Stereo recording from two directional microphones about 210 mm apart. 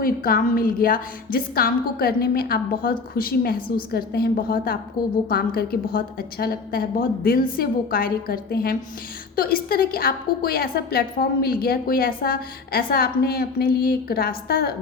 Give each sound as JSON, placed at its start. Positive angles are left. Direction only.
{"t": 0.0, "sound": "a woman's voice", "side_deg": 40}